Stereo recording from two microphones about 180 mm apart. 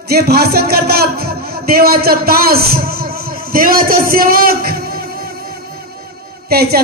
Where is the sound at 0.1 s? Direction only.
60° right (ahead or behind).